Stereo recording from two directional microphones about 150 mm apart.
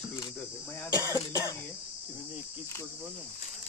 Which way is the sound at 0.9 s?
25° left (ahead or behind).